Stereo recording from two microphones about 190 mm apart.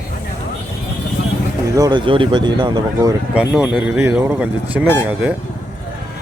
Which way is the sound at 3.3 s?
5° right (ahead or behind).